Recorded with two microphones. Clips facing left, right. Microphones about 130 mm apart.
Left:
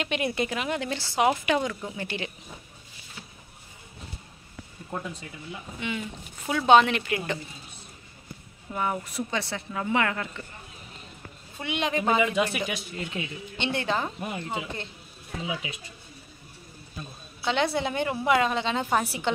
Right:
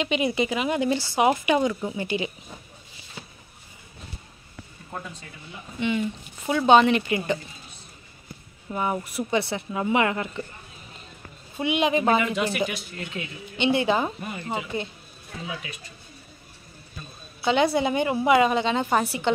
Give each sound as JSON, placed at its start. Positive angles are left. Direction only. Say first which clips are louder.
{"t": 0.0, "sound": "a woman's voice", "louder": "right 4 dB", "side_deg": 0}
{"t": 5.8, "sound": "a woman's voice", "louder": "right 8 dB", "side_deg": 5}
{"t": 8.7, "sound": "speech", "louder": "right 2 dB", "side_deg": -10}
{"t": 11.5, "sound": "speech", "louder": "right 6 dB", "side_deg": -10}
{"t": 12.6, "sound": "speech", "louder": "right 1 dB", "side_deg": 15}
{"t": 13.6, "sound": "speech", "louder": "right 6 dB", "side_deg": -5}
{"t": 15.4, "sound": "speech", "louder": "left 2 dB", "side_deg": 15}
{"t": 17.4, "sound": "a woman's voice", "louder": "right 5 dB", "side_deg": -5}